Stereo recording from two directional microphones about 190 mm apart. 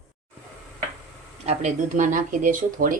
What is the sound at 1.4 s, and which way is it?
Speech, 40° right (ahead or behind).